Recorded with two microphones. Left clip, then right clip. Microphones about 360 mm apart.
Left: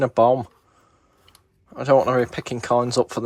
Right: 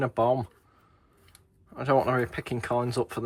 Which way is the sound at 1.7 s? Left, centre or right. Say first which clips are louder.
Left 7 dB; centre.